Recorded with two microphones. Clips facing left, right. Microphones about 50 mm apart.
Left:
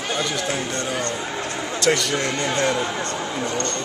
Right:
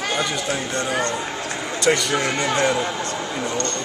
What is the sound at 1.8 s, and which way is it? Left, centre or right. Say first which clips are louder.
Speech: right 1 dB; centre.